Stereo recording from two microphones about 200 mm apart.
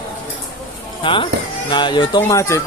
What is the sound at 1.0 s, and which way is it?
Music, 25° left (ahead or behind).